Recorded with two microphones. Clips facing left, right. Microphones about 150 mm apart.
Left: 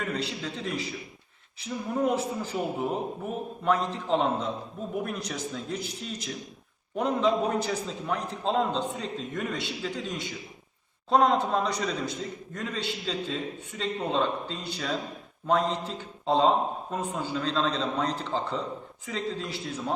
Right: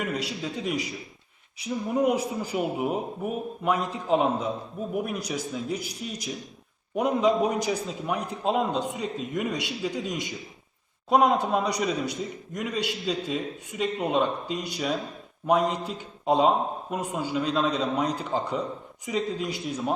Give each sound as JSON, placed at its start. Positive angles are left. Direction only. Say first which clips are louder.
{"t": 0.0, "sound": "a man's voice", "louder": "right 2 dB", "side_deg": -10}